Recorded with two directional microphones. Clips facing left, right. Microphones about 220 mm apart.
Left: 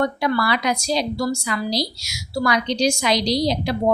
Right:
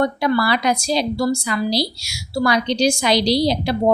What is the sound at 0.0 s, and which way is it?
A woman's voice, 35° right (ahead or behind).